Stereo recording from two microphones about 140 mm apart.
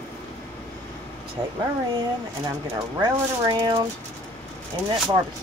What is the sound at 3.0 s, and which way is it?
Speech, 30° right (ahead or behind).